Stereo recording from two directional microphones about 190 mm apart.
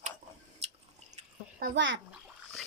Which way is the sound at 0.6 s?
35° right (ahead or behind).